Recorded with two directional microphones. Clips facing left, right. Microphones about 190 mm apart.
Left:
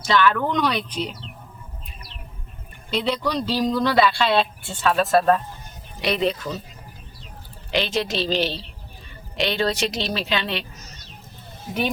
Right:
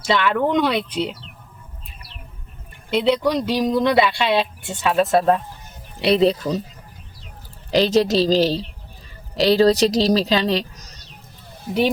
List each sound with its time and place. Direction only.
0.1 s speech: 25° right (ahead or behind)
2.9 s speech: 20° right (ahead or behind)
6.0 s speech: 30° right (ahead or behind)
7.7 s speech: 40° right (ahead or behind)
11.7 s speech: 25° left (ahead or behind)